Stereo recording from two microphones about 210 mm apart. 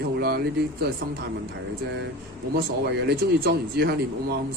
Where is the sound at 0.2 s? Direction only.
45° right (ahead or behind).